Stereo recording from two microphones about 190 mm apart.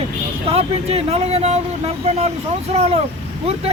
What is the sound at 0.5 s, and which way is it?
Speech, 35° right (ahead or behind).